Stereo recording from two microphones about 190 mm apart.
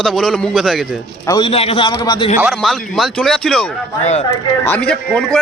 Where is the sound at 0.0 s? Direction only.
Centre (ahead or behind).